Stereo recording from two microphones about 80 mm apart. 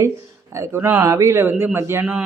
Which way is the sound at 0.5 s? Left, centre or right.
Right.